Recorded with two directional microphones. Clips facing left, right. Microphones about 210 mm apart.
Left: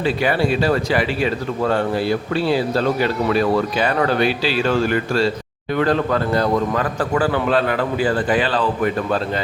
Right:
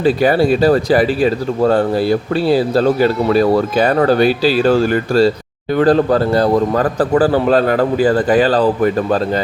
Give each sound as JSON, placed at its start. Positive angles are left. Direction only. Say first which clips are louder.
{"t": 0.0, "sound": "speech", "louder": "right 6 dB", "side_deg": -40}